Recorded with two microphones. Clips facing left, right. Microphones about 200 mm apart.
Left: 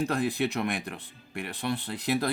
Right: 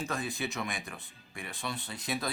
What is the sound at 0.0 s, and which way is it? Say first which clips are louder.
Speech: left 8 dB; 60° left (ahead or behind).